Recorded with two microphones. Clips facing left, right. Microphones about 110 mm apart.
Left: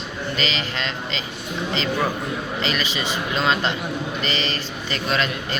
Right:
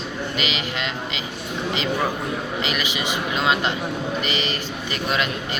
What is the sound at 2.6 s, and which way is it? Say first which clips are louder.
A man's voice: left 1 dB; 15° right (ahead or behind).